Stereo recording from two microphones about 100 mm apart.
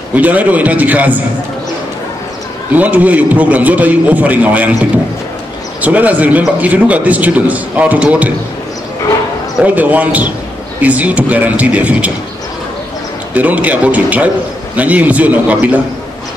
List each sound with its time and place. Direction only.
0.1 s a man's voice: 15° right (ahead or behind)
2.8 s a man's voice: 15° right (ahead or behind)
9.6 s a man's voice: 15° right (ahead or behind)
13.3 s a man's voice: 15° right (ahead or behind)